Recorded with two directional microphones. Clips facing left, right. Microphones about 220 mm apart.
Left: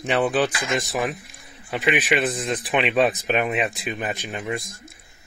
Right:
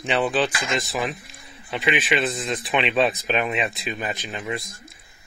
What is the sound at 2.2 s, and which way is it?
Speech, 45° left (ahead or behind).